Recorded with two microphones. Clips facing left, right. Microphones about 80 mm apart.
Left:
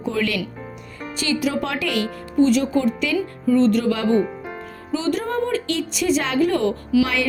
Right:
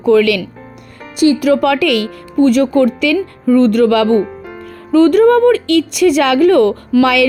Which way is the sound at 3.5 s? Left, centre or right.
Right.